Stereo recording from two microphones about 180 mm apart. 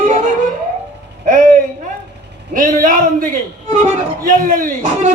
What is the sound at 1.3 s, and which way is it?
A woman's voice, 50° right (ahead or behind).